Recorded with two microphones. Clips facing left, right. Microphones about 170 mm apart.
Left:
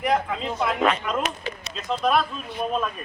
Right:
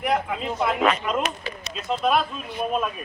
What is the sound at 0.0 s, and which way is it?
Speech, 5° right (ahead or behind).